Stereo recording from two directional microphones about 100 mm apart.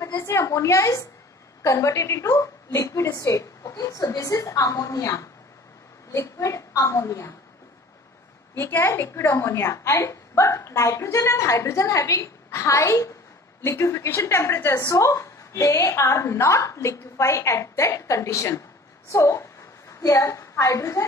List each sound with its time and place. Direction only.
0.2 s a woman's voice: 30° left (ahead or behind)
8.5 s a woman's voice: 25° left (ahead or behind)